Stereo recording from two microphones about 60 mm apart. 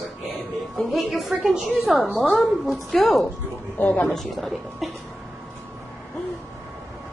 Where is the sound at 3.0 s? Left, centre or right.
Centre.